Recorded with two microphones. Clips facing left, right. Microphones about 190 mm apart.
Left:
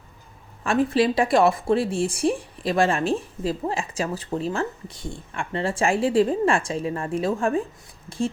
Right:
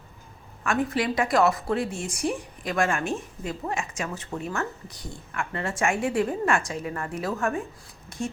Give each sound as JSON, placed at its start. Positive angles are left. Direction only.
{"t": 0.6, "sound": "a woman's voice", "side_deg": 30}